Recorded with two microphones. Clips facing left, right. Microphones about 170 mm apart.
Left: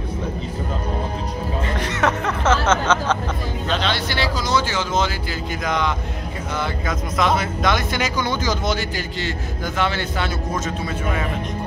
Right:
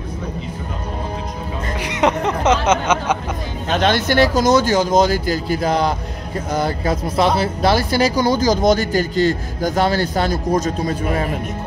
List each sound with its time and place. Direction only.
1.8 s speech: 15° right (ahead or behind)
3.6 s speech: 50° right (ahead or behind)